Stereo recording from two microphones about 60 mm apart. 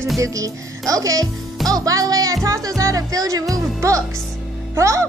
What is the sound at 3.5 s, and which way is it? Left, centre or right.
Speech, right.